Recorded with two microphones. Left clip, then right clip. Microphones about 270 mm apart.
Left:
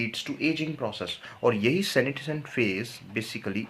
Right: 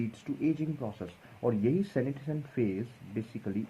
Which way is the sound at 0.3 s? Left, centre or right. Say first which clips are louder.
Left 1 dB; centre.